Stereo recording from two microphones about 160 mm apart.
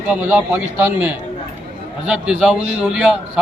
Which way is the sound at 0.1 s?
10° right (ahead or behind).